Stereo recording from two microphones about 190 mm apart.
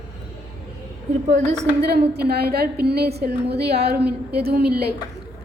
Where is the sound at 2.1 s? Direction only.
55° right (ahead or behind).